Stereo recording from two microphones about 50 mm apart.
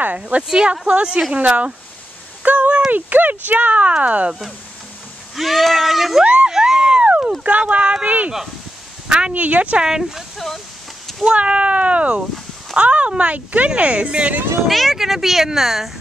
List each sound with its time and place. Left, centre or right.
0.0 s speech: right
0.4 s speech: centre
2.4 s a sound: right
2.9 s speech: right
5.3 s speech: centre
6.2 s a sound: right
7.4 s speech: right
9.3 s speech: right
9.8 s speech: centre
10.3 s speech: centre
11.3 s speech: right
14.7 s speech: centre